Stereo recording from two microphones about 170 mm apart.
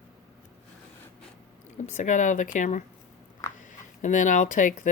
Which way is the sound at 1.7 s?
45° left (ahead or behind).